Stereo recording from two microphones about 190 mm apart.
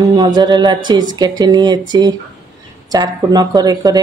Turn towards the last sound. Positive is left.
turn(degrees=-20)  # may be behind; listen again after turning